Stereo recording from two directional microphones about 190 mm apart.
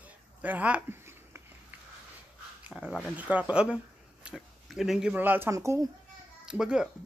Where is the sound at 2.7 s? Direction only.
Centre (ahead or behind); by 5.8 s 15° right (ahead or behind).